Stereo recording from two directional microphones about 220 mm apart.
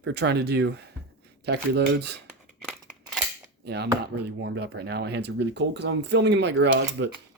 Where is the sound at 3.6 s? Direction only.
50° right (ahead or behind).